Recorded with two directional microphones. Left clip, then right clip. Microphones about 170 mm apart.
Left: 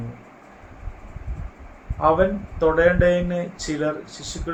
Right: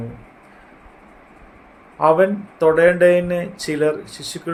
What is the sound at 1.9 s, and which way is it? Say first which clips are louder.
Speech: right 4 dB; 60° right (ahead or behind).